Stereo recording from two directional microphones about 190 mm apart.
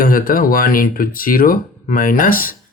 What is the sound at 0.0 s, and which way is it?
Speech, 50° left (ahead or behind).